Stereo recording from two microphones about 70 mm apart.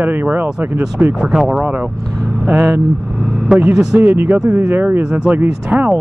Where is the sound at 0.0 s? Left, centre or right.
Right.